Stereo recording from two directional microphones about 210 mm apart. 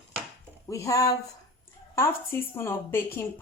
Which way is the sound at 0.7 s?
15° left (ahead or behind).